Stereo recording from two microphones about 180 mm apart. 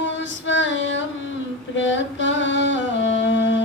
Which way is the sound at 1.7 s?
90° left.